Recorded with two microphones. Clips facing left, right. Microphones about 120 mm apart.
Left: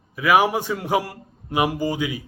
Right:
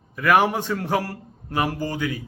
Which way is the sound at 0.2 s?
5° left (ahead or behind).